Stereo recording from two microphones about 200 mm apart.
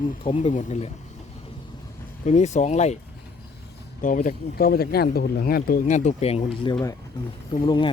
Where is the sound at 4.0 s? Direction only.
40° left (ahead or behind).